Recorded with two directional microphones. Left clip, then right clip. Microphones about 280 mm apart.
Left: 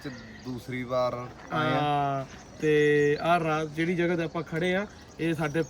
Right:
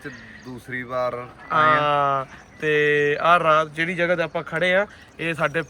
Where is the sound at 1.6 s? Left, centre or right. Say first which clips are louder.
Right 10 dB; right.